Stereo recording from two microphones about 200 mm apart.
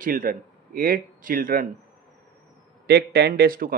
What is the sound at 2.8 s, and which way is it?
Speech, 55° right (ahead or behind).